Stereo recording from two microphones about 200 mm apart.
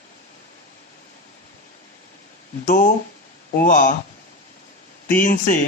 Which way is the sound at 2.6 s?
40° left (ahead or behind).